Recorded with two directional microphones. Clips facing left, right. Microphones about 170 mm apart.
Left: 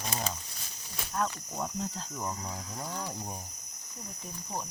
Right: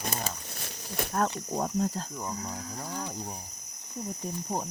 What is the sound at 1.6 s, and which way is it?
Speech, 45° right (ahead or behind).